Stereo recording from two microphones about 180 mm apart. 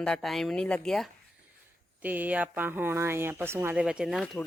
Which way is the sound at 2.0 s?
10° right (ahead or behind).